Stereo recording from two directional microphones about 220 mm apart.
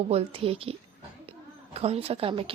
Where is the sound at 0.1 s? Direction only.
25° right (ahead or behind).